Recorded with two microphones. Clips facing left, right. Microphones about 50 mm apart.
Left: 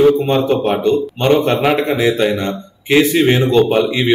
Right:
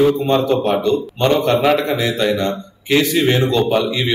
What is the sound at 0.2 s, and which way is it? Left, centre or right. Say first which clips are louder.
A man's voice: left 1 dB; left.